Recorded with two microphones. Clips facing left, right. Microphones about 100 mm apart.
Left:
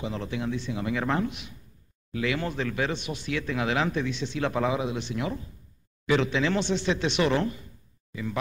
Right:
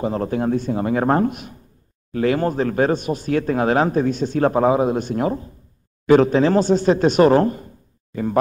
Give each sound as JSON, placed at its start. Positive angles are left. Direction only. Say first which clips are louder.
{"t": 0.0, "sound": "speech", "louder": "right 10 dB", "side_deg": -45}